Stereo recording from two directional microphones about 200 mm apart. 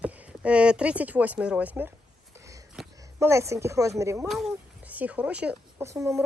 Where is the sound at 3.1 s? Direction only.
15° right (ahead or behind).